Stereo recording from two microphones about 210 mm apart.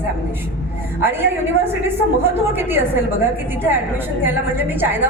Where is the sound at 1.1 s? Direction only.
10° right (ahead or behind).